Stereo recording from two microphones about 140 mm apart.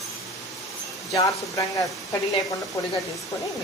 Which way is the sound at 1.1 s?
25° left (ahead or behind).